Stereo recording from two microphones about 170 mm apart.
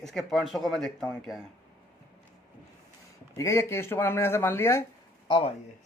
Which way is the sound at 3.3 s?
15° left (ahead or behind).